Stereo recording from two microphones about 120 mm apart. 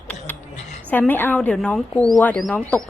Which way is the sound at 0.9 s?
15° left (ahead or behind).